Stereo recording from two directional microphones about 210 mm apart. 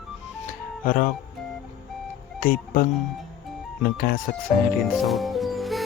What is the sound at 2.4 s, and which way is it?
Speech, 40° left (ahead or behind).